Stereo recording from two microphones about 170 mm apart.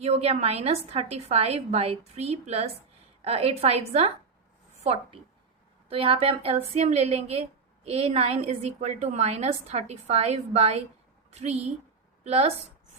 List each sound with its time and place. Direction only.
0.0 s a woman's voice: 40° right (ahead or behind)